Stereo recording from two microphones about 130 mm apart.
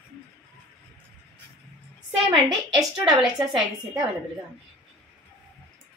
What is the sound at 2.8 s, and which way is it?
Speech, 25° right (ahead or behind).